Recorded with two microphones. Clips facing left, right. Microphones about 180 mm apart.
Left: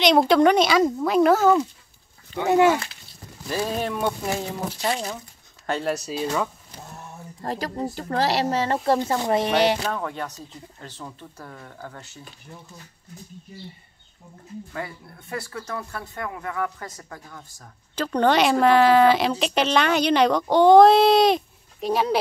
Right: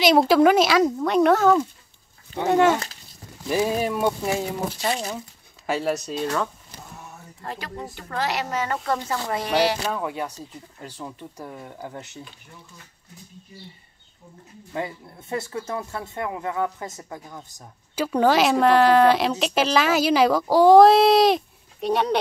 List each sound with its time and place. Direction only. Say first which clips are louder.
0.0 s speech: right 1 dB; 5° right (ahead or behind)
3.4 s speech: right 3 dB; 10° right (ahead or behind); by 6.5 s 5° left (ahead or behind)
7.4 s speech: left 6 dB; 35° left (ahead or behind); by 9.8 s 20° left (ahead or behind)
9.8 s speech: right 1 dB; 10° right (ahead or behind)
14.7 s speech: right 6 dB; 20° right (ahead or behind)
17.9 s speech: right 1 dB; 5° right (ahead or behind)